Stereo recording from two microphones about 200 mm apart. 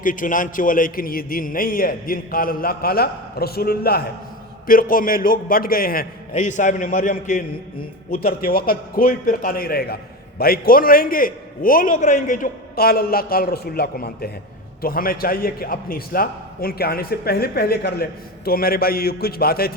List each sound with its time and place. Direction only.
0.0 s a man's voice: 40° left (ahead or behind)